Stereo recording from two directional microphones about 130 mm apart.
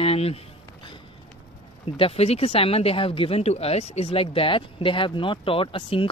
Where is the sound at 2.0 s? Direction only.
50° left (ahead or behind).